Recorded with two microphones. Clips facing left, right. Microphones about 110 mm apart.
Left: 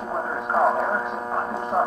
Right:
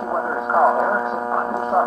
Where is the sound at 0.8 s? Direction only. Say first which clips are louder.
Right 5 dB; 25° right (ahead or behind).